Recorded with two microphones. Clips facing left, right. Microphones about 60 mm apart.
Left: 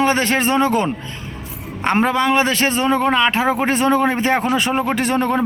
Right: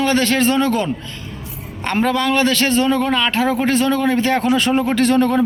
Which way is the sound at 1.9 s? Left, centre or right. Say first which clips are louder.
Even; left.